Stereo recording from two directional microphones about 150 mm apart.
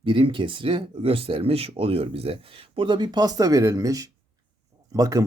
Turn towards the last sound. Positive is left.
turn(degrees=-25)  # may be behind; listen again after turning